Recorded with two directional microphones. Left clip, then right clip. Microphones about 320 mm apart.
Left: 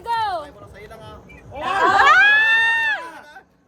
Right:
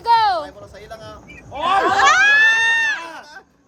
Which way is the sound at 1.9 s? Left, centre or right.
Centre.